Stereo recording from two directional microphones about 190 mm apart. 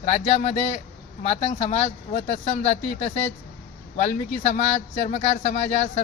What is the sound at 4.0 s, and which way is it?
Speech, 35° left (ahead or behind).